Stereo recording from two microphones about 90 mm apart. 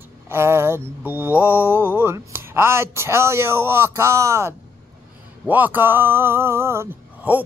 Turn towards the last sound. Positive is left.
turn(degrees=-25)  # may be behind; listen again after turning